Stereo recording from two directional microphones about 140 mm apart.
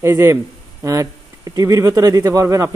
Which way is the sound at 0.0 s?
20° right (ahead or behind).